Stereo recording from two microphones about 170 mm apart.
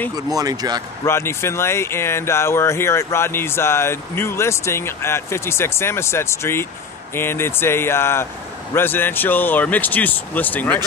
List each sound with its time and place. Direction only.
0.1 s speech: 20° right (ahead or behind)
1.0 s speech: 15° left (ahead or behind)